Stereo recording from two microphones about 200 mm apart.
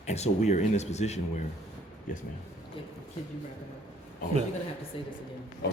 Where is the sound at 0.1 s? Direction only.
35° left (ahead or behind).